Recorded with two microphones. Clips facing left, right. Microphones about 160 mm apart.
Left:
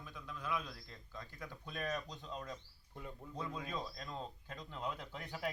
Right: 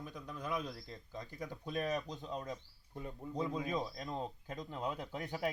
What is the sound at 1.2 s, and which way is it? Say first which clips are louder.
Speech: right 6 dB; 15° right (ahead or behind).